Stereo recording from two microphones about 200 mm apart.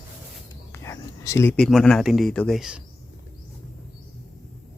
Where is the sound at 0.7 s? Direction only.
15° left (ahead or behind); by 2.8 s centre (ahead or behind).